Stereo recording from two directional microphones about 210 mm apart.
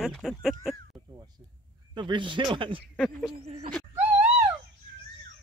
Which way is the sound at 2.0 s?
20° right (ahead or behind).